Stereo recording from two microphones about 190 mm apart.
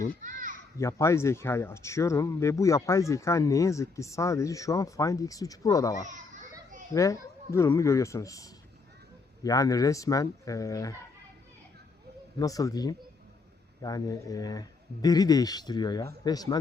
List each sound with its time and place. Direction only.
0.2 s children playing: 45° right (ahead or behind)
0.8 s speech: 15° left (ahead or behind)
6.1 s children playing: 40° right (ahead or behind)
6.9 s speech: 15° left (ahead or behind)
12.4 s a man's voice: 20° left (ahead or behind)